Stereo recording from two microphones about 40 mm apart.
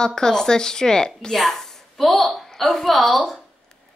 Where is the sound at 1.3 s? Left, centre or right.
Centre.